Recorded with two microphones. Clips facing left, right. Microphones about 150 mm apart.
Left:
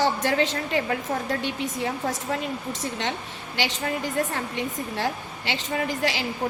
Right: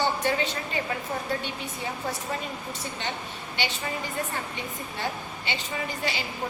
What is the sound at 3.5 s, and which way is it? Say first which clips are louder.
A woman's voice: left 4 dB; 90° left.